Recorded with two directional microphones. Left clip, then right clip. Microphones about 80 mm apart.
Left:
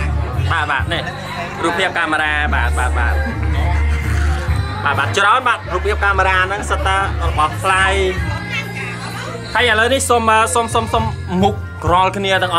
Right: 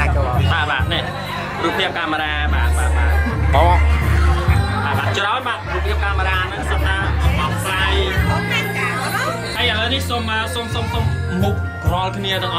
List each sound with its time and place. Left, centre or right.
0.5 s speech: centre
5.1 s speech: centre
7.6 s speech: left
9.6 s speech: left